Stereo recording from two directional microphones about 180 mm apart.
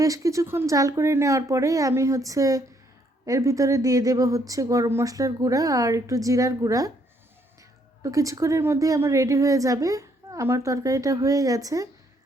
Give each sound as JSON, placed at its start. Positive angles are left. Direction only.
{"t": 0.0, "sound": "a woman's voice", "side_deg": -20}
{"t": 8.0, "sound": "a woman's voice", "side_deg": -20}